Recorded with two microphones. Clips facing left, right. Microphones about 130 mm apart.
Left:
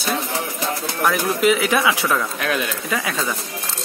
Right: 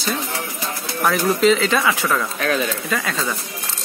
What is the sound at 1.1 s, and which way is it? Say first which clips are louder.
Speech: right 3 dB; 10° left (ahead or behind).